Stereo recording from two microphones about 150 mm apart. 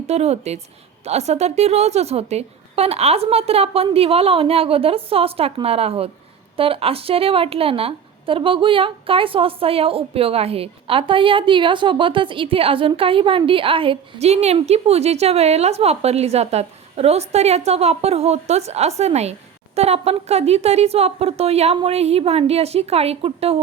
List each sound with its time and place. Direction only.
0.1 s a woman's voice: 45° right (ahead or behind)